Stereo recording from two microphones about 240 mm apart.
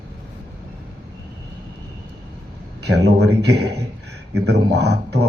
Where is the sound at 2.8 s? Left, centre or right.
Right.